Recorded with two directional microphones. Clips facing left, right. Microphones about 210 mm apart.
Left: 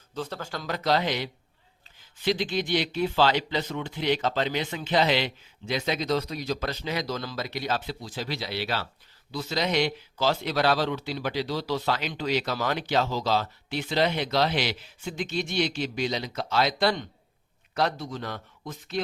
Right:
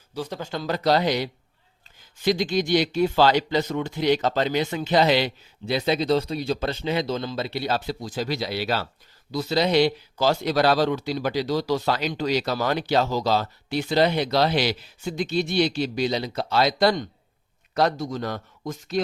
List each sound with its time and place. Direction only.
0.1 s speech: 10° right (ahead or behind); by 18.9 s 40° right (ahead or behind)